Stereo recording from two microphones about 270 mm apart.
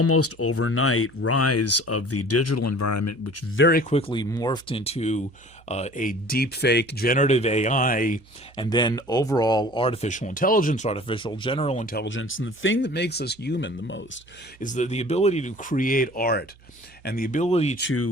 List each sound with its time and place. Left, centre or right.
0.0 s speech: left
3.6 s speech: left
8.5 s speech: centre
11.9 s speech: left
14.6 s speech: left